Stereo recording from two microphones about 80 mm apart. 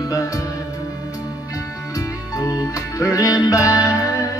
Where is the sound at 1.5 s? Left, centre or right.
Left.